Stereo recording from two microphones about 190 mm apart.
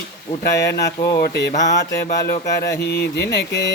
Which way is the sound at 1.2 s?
60° left (ahead or behind).